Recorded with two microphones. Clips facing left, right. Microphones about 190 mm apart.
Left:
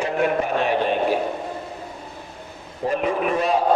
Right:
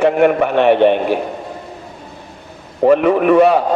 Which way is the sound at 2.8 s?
65° right (ahead or behind).